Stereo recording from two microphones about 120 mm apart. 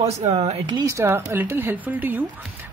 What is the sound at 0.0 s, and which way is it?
Speech, 60° right (ahead or behind).